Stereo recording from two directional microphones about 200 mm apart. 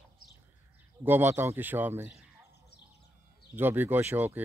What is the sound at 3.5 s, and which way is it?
Speech, 10° right (ahead or behind).